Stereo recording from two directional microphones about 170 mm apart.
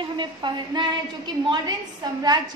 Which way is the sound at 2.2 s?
25° right (ahead or behind).